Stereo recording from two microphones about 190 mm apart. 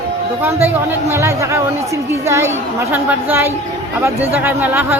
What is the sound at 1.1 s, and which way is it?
A woman's voice, 15° right (ahead or behind).